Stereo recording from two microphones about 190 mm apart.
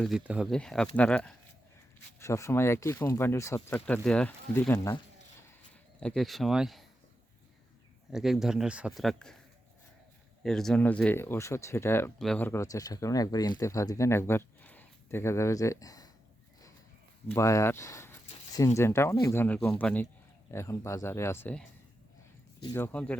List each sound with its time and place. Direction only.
0.0 s speech: 5° right (ahead or behind)
6.0 s speech: 5° left (ahead or behind)
8.1 s speech: centre (ahead or behind)
10.4 s speech: 5° left (ahead or behind); by 16.0 s 20° left (ahead or behind)
17.3 s speech: 15° left (ahead or behind)
22.7 s speech: 10° left (ahead or behind)